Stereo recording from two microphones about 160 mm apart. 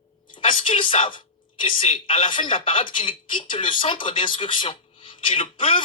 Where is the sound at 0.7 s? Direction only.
30° left (ahead or behind).